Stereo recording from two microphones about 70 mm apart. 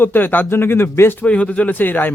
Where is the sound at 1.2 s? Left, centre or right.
Centre.